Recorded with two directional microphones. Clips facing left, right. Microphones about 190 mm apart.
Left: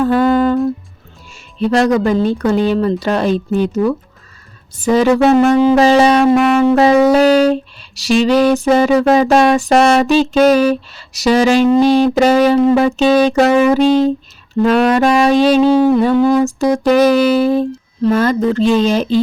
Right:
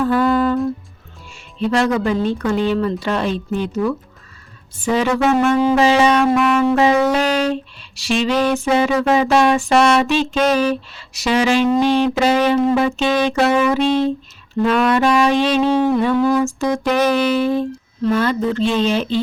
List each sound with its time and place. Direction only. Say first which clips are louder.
0.0 s humming: left 4 dB; 40° left (ahead or behind)
1.7 s music: left 5 dB; 40° left (ahead or behind)
15.7 s a sound: left 5 dB; 5° left (ahead or behind)
16.1 s music: left 4 dB; 30° left (ahead or behind)